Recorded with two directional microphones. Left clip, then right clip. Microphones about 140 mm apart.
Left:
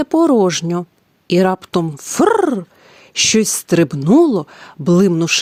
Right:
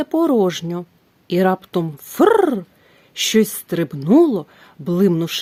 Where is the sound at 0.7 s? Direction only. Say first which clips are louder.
Left 6 dB; 40° left (ahead or behind).